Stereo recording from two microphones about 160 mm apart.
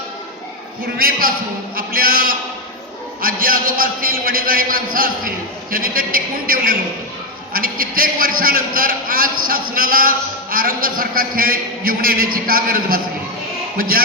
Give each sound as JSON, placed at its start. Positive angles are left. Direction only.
{"t": 0.9, "sound": "a man's voice", "side_deg": -65}